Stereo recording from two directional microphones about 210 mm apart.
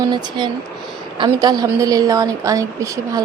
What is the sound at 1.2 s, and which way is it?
Speech, 20° right (ahead or behind).